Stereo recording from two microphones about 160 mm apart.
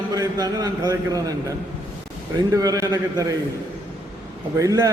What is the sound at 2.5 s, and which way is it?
Speech, 20° right (ahead or behind).